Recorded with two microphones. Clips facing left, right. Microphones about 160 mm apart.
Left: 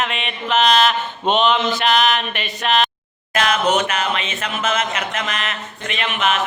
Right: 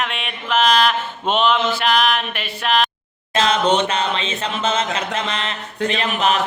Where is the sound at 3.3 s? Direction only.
30° right (ahead or behind).